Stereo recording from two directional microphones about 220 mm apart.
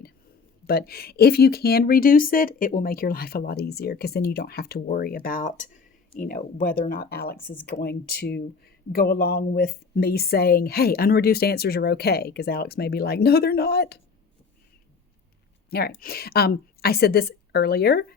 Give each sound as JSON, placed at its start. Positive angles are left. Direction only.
{"t": 0.7, "sound": "speech", "side_deg": 45}
{"t": 15.7, "sound": "speech", "side_deg": 45}